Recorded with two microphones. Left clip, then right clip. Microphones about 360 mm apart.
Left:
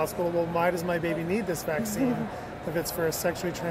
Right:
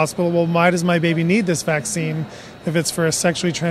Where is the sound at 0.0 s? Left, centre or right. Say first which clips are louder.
Right 8 dB; right.